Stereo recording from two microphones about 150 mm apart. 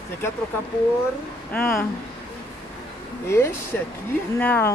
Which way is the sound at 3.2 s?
15° left (ahead or behind).